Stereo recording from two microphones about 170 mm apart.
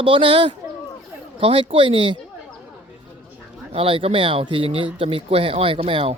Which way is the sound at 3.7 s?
35° right (ahead or behind).